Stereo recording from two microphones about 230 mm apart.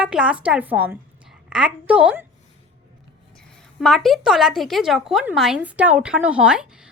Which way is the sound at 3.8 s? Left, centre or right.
Centre.